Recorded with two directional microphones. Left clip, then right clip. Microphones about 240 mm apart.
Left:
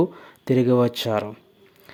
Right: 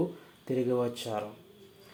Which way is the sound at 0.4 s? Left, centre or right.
Left.